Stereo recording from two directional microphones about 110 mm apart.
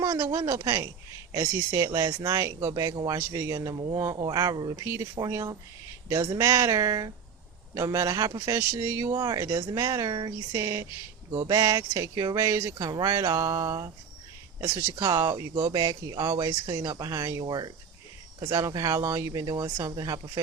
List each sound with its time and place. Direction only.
0.0 s speech: 30° right (ahead or behind)
3.8 s speech: 45° right (ahead or behind)